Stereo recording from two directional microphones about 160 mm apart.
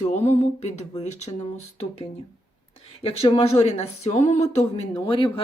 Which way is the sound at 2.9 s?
40° left (ahead or behind).